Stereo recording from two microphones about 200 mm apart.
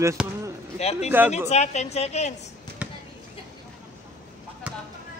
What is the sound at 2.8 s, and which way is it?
Basketball bounce, 5° right (ahead or behind).